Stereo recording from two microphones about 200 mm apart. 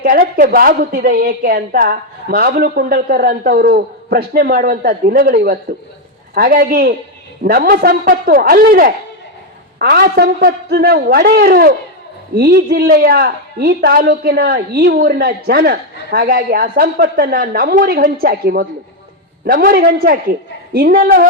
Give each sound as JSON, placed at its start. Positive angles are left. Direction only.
{"t": 0.0, "sound": "a woman's voice", "side_deg": -45}